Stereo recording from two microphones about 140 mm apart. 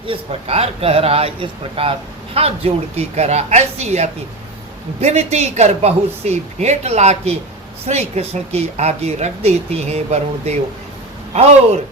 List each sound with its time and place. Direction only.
0.0 s speech: 40° right (ahead or behind)